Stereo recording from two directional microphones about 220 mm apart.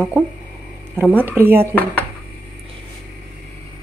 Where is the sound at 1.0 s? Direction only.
10° right (ahead or behind).